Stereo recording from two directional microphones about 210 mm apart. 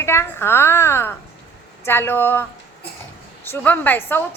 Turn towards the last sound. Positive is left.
turn(degrees=10)  # may be behind; listen again after turning